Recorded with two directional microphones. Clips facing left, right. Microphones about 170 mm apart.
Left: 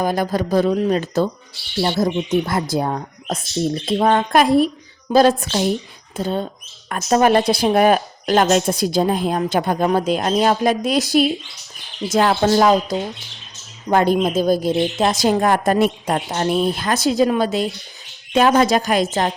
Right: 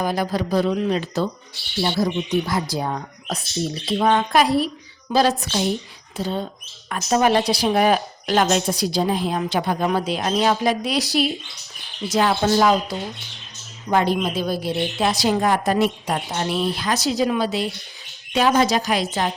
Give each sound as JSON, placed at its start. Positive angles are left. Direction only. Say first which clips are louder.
{"t": 0.0, "sound": "speech", "louder": "left 3 dB", "side_deg": 50}